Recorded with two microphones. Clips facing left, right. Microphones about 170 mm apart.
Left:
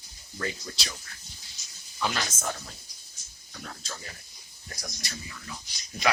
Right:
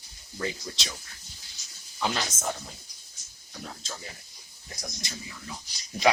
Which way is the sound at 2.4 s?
10° right (ahead or behind).